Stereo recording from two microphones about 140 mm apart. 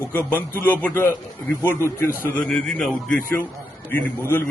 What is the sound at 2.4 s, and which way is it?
Speech, 5° left (ahead or behind).